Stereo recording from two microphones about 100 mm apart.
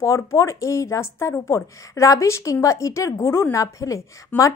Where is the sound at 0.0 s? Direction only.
35° left (ahead or behind).